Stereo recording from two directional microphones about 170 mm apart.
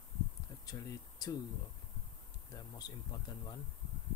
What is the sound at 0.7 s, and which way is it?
Speech, 20° left (ahead or behind).